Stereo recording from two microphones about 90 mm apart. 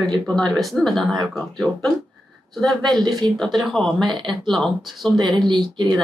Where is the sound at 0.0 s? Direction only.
5° left (ahead or behind).